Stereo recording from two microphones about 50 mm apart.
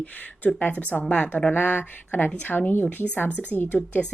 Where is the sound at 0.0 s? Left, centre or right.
Left.